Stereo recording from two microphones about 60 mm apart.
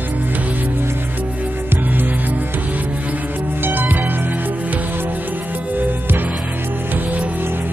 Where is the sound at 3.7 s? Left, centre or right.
Right.